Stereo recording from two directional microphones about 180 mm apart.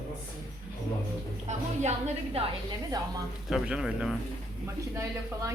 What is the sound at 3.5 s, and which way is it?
Speech, 5° right (ahead or behind).